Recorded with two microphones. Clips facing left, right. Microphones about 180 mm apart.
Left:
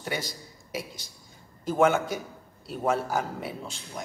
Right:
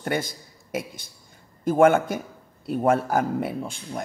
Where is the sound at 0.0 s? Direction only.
55° right (ahead or behind).